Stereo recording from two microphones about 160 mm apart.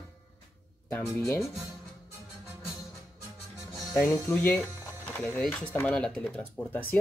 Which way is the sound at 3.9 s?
10° left (ahead or behind).